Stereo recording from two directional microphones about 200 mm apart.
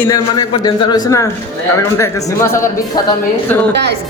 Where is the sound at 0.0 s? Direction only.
20° left (ahead or behind).